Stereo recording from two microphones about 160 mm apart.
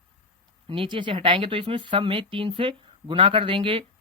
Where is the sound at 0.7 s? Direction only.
35° right (ahead or behind).